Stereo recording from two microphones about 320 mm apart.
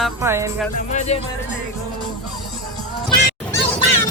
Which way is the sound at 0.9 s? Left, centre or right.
Left.